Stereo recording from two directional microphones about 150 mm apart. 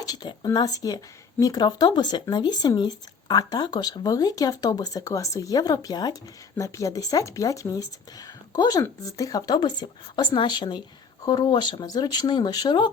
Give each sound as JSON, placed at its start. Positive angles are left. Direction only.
{"t": 0.0, "sound": "speech", "side_deg": 25}